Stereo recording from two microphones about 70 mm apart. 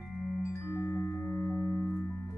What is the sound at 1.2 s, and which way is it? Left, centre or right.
Marimba, centre.